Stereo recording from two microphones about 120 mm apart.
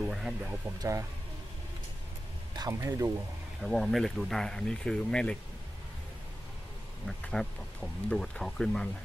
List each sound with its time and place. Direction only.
0.0 s music: centre (ahead or behind)
0.7 s speech: 30° right (ahead or behind)
2.5 s speech: 30° right (ahead or behind)
3.6 s speech: centre (ahead or behind)
7.1 s speech: 5° left (ahead or behind)